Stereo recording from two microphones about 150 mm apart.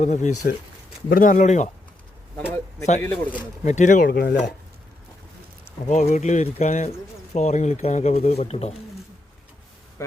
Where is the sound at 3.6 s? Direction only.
55° left (ahead or behind); by 4.4 s 90° left.